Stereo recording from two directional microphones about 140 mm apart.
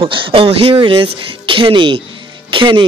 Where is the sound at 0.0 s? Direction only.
40° right (ahead or behind).